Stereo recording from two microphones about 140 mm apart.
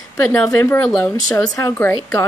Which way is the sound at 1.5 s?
20° left (ahead or behind).